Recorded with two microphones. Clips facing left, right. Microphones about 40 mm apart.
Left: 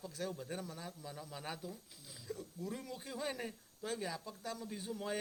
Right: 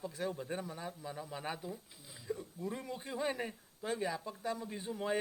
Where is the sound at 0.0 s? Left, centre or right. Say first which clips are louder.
Right 4 dB; centre.